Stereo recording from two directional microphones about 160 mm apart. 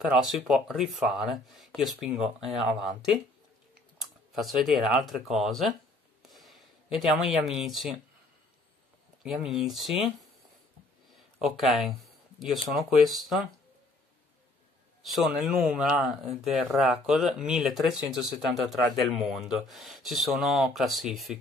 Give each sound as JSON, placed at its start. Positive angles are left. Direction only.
{"t": 0.0, "sound": "speech", "side_deg": 0}
{"t": 6.2, "sound": "a sound", "side_deg": 0}
{"t": 9.2, "sound": "speech", "side_deg": -5}
{"t": 11.4, "sound": "speech", "side_deg": 0}
{"t": 15.1, "sound": "speech", "side_deg": 0}